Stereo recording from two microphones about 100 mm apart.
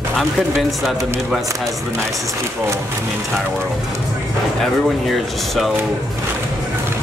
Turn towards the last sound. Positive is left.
turn(degrees=0)  # may be behind; listen again after turning